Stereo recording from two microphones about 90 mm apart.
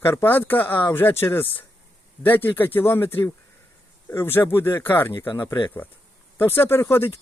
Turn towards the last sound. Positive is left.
turn(degrees=30)  # may be behind; listen again after turning